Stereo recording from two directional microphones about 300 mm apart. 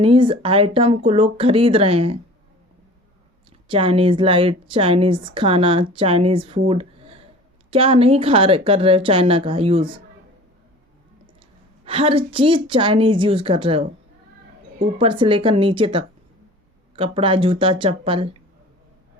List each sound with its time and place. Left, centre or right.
0.0 s a woman's voice: centre
3.7 s a woman's voice: centre
11.9 s a woman's voice: centre
14.9 s a woman's voice: centre